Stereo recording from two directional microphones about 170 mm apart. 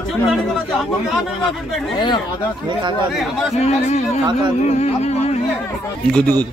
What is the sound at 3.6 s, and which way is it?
A man's voice, 40° left (ahead or behind).